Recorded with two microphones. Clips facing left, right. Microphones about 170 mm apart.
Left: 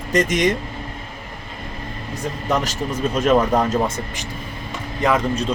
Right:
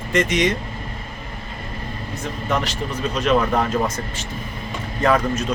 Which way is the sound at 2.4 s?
45° left (ahead or behind).